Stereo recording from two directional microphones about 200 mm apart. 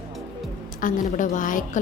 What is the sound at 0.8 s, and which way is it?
A woman's voice, 40° left (ahead or behind).